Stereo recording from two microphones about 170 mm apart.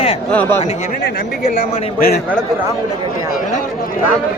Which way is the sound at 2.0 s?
65° left (ahead or behind).